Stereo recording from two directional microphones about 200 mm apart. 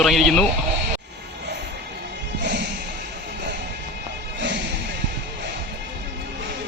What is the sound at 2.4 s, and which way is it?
Music, 60° right (ahead or behind).